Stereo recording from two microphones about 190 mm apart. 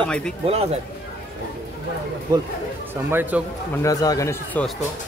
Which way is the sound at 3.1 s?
10° right (ahead or behind).